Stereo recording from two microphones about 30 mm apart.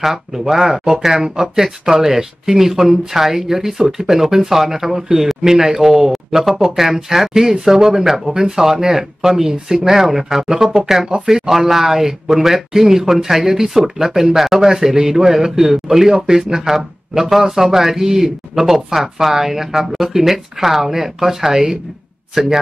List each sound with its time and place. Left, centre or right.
0.0 s speech: centre
6.1 s speech: centre